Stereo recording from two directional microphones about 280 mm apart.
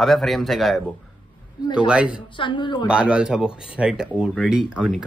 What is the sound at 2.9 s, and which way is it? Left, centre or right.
Speech, centre.